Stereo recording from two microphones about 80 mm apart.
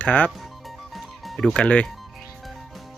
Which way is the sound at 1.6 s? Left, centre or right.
Centre.